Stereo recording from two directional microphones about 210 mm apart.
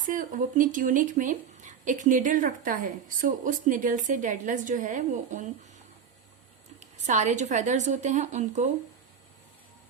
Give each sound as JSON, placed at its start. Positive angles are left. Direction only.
{"t": 0.0, "sound": "speech", "side_deg": -40}
{"t": 6.7, "sound": "speech", "side_deg": -35}